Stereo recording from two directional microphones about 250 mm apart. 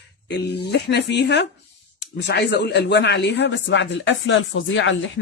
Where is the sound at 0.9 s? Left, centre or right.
Left.